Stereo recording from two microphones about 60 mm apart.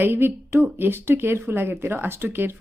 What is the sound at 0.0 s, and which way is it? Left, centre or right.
Speech, right.